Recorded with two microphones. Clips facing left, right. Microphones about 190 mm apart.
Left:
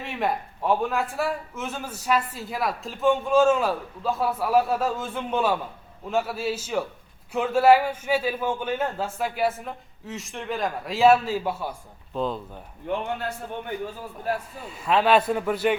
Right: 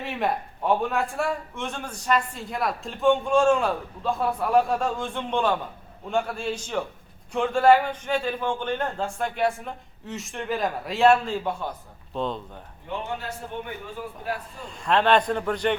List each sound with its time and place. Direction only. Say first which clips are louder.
0.0 s a man's voice: even; centre (ahead or behind)
12.9 s a man's voice: left 5 dB; 55° left (ahead or behind)
14.6 s a man's voice: right 1 dB; 5° left (ahead or behind)